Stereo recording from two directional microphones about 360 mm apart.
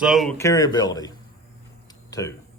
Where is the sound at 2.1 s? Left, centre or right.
Centre.